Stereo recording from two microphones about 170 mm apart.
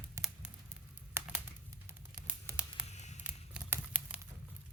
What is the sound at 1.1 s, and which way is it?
Crumpling, 10° right (ahead or behind).